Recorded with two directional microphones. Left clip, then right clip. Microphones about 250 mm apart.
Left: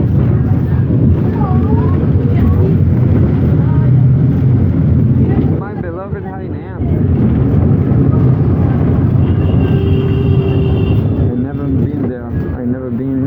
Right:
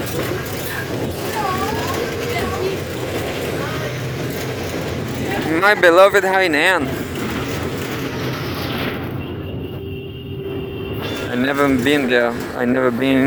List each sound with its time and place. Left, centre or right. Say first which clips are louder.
5.6 s speech: right 14 dB; right